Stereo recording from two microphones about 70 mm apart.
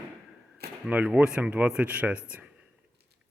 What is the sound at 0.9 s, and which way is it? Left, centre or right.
Speech, centre.